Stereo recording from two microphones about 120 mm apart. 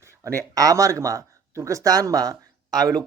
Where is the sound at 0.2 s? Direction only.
25° right (ahead or behind).